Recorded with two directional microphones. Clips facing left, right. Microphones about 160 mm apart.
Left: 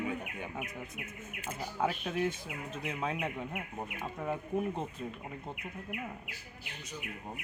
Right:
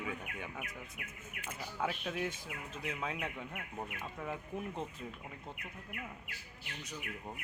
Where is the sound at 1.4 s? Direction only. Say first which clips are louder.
Left 5 dB; 35° left (ahead or behind).